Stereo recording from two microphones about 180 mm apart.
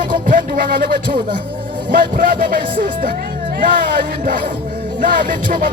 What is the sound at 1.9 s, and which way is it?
Music, 50° right (ahead or behind).